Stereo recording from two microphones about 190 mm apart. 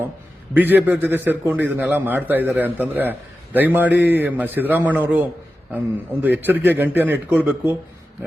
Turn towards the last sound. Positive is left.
turn(degrees=-10)  # may be behind; listen again after turning